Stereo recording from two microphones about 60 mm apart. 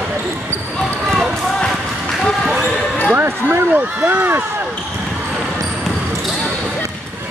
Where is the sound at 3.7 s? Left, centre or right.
Right.